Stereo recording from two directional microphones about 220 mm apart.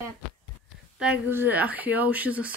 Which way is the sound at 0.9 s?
5° right (ahead or behind).